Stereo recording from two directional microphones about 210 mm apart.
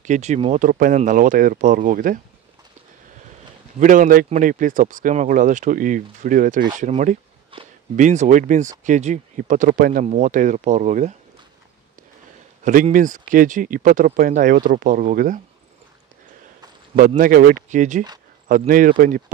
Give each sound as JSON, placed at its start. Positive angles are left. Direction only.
{"t": 0.0, "sound": "speech", "side_deg": -35}
{"t": 3.8, "sound": "speech", "side_deg": -40}
{"t": 12.6, "sound": "speech", "side_deg": -40}
{"t": 17.2, "sound": "speech", "side_deg": -40}